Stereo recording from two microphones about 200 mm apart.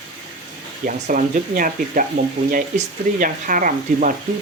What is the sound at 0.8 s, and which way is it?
Speech, 45° right (ahead or behind).